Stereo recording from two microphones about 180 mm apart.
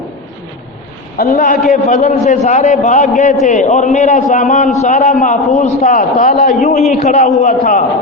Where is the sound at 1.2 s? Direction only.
60° left (ahead or behind).